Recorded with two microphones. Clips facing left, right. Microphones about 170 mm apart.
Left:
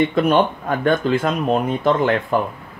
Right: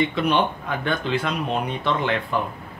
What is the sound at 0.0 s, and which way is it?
Speech, 50° left (ahead or behind).